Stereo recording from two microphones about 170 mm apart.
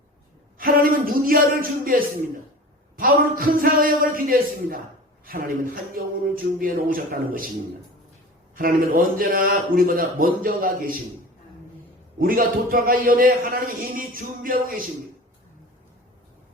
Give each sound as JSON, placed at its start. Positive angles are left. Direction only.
{"t": 0.6, "sound": "a sound", "side_deg": -55}
{"t": 1.8, "sound": "a man's voice", "side_deg": -55}
{"t": 8.5, "sound": "a man's voice", "side_deg": -55}
{"t": 12.2, "sound": "a man's voice", "side_deg": -55}